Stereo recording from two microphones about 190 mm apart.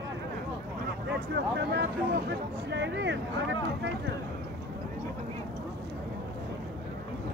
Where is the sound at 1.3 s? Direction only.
60° right (ahead or behind).